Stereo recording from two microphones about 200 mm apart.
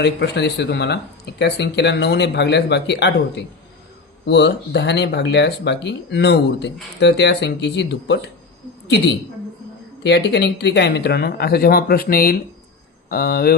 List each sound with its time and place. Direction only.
0.0 s speech: 60° left (ahead or behind)
10.0 s speech: 60° left (ahead or behind)